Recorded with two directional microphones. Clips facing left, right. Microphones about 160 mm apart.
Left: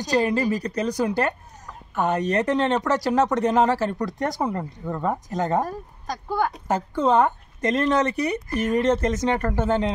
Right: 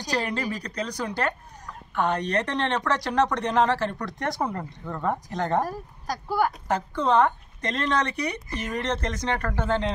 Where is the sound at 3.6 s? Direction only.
10° left (ahead or behind).